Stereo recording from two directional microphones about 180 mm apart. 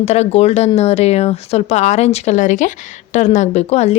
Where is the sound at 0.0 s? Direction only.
40° left (ahead or behind).